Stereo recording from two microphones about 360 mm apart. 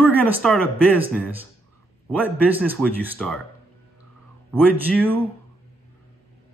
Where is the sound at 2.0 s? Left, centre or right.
Centre.